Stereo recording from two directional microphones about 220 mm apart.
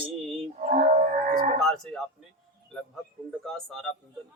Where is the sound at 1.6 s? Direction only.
Centre (ahead or behind).